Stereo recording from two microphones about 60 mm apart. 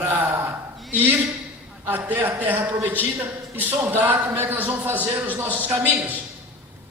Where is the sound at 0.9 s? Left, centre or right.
Right.